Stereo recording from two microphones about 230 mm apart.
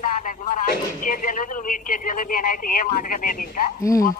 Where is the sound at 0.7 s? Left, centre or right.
Left.